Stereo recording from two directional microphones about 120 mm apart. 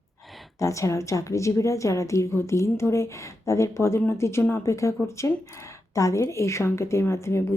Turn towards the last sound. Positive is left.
turn(degrees=25)  # may be behind; listen again after turning